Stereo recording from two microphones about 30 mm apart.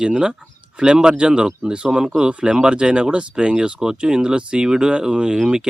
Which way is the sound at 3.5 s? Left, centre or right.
Right.